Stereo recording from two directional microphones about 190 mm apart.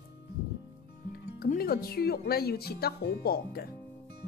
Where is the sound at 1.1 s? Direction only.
50° left (ahead or behind).